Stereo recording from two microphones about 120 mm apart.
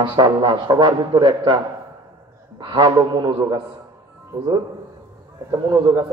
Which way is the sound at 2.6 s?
40° right (ahead or behind).